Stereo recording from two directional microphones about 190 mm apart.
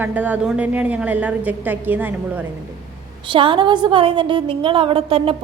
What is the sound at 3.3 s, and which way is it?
A woman's voice, 25° right (ahead or behind).